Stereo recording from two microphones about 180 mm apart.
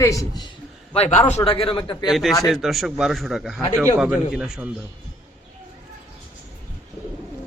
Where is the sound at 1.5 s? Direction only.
30° left (ahead or behind).